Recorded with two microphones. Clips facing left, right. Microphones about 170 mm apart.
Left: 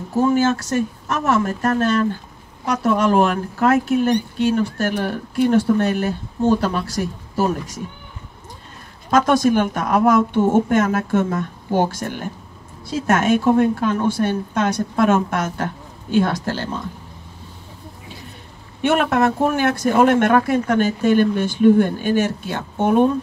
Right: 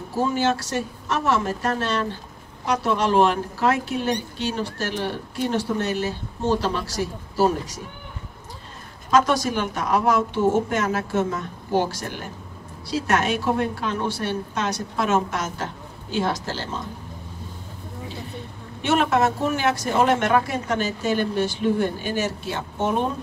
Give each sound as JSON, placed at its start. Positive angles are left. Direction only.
{"t": 0.3, "sound": "speech", "side_deg": 50}
{"t": 9.1, "sound": "speech", "side_deg": 50}
{"t": 18.8, "sound": "speech", "side_deg": 55}